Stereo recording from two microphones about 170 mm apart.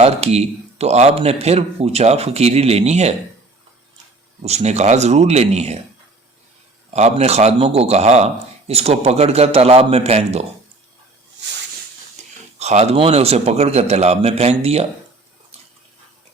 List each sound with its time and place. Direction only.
0.0 s a man's voice: 40° right (ahead or behind)
4.4 s a man's voice: 40° right (ahead or behind)
6.9 s a man's voice: 40° right (ahead or behind)
12.2 s a sound: 45° right (ahead or behind)
12.5 s a man's voice: 40° right (ahead or behind)